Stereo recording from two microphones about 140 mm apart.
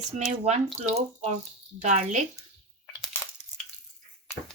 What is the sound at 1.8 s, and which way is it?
Speech, 55° right (ahead or behind).